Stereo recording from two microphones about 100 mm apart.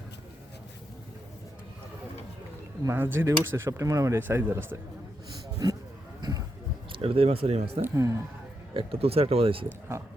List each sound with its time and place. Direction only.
2.8 s speech: 25° right (ahead or behind)
4.2 s speech: 20° right (ahead or behind)
5.6 s speech: 40° right (ahead or behind)
6.9 s speech: 70° right (ahead or behind); by 7.6 s 85° right
7.8 s speech: 25° right (ahead or behind)
8.7 s speech: 70° right (ahead or behind)